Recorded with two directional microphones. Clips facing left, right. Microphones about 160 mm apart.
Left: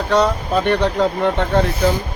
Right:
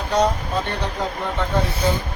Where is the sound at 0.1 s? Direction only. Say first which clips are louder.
Left 3 dB; 70° left (ahead or behind).